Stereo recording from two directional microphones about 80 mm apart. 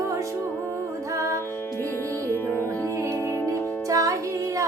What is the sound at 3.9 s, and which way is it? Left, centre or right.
Music, right.